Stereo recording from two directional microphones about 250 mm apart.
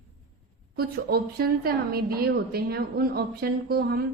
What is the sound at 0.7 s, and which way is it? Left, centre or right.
Speech, right.